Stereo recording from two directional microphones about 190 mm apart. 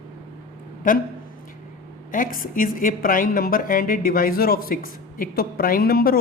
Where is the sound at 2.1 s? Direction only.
45° left (ahead or behind).